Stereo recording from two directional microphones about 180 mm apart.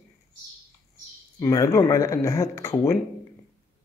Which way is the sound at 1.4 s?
20° left (ahead or behind).